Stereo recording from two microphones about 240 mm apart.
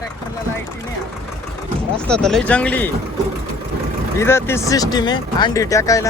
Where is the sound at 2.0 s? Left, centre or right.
Centre.